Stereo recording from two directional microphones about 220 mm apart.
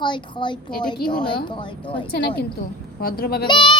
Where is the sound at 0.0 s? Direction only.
20° left (ahead or behind).